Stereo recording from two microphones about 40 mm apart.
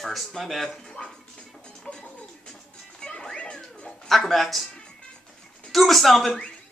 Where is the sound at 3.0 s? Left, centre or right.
Left.